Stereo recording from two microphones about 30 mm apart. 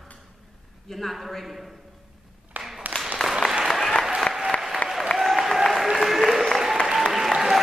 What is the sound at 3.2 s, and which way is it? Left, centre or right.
Applause, left.